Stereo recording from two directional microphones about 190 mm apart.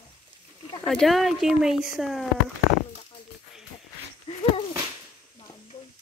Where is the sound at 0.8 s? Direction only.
Centre (ahead or behind).